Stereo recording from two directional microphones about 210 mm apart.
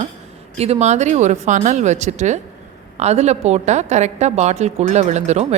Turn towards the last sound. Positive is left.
turn(degrees=-30)  # may be behind; listen again after turning